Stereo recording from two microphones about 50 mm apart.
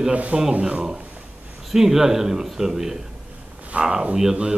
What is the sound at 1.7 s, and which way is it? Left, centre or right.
A man's voice, centre.